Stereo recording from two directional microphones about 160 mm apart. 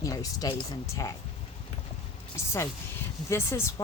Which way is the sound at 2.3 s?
15° left (ahead or behind).